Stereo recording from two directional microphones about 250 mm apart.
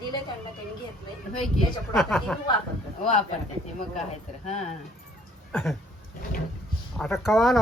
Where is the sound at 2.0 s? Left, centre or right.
Centre.